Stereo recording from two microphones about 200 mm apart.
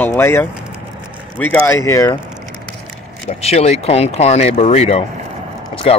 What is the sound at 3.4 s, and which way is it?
Speech, 30° left (ahead or behind).